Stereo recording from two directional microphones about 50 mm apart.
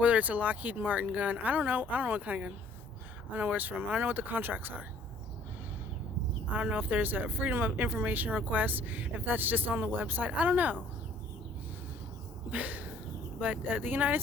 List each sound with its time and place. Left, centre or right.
0.0 s speech: right
6.5 s speech: right
12.5 s a sound: right
13.7 s speech: right